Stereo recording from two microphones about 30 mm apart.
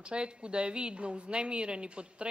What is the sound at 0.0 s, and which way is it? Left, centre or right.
A man's voice, right.